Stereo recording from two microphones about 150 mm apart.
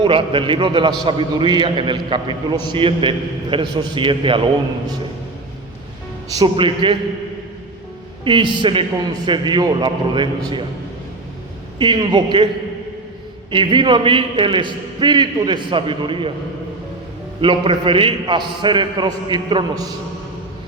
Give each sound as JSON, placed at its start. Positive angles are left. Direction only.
{"t": 0.0, "sound": "a man's voice", "side_deg": -35}
{"t": 6.4, "sound": "a man's voice", "side_deg": -35}
{"t": 8.2, "sound": "a man's voice", "side_deg": -35}
{"t": 11.8, "sound": "a man's voice", "side_deg": -30}
{"t": 13.5, "sound": "a man's voice", "side_deg": -35}
{"t": 17.4, "sound": "a man's voice", "side_deg": -35}